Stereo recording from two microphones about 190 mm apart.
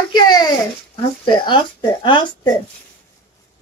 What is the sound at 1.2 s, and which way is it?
Speech, 25° left (ahead or behind).